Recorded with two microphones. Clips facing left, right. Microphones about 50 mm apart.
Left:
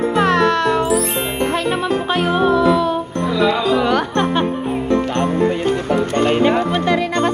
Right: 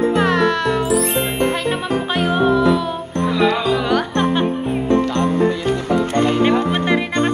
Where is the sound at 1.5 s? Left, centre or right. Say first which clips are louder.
Left 2 dB; centre.